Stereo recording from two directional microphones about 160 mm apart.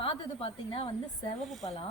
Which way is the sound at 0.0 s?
35° left (ahead or behind).